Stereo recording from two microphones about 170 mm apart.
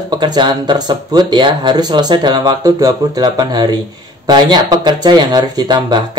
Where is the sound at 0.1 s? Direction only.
25° right (ahead or behind).